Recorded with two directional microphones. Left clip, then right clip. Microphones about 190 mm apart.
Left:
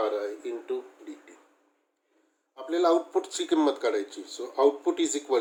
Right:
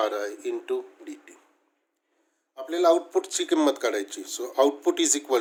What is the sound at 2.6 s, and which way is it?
Speech, 25° right (ahead or behind).